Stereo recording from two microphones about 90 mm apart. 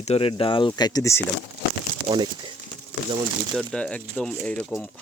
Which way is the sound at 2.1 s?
60° right (ahead or behind).